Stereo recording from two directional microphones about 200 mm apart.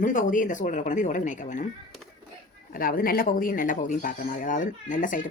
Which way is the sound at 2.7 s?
45° left (ahead or behind).